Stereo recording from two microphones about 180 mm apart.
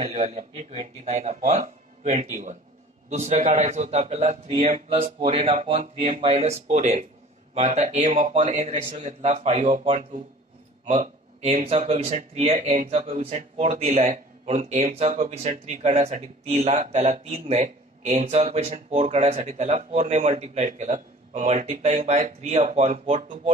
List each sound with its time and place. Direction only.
0.0 s speech: 40° right (ahead or behind)